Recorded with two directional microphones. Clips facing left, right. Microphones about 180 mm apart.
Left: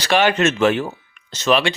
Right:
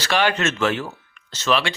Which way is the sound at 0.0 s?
15° left (ahead or behind).